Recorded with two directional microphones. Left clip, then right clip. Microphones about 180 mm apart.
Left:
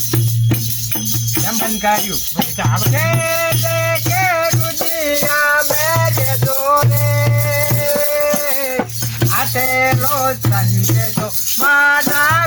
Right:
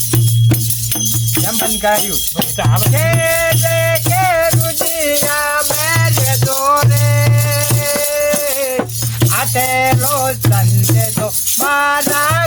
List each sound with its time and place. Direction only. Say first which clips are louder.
1.5 s jingle bell: right 1 dB; 25° right (ahead or behind)
2.6 s music: right 2 dB; 35° right (ahead or behind)
6.7 s music: right 1 dB; 20° right (ahead or behind)
7.7 s music: even; 5° right (ahead or behind)
9.2 s music: right 1 dB; 30° right (ahead or behind)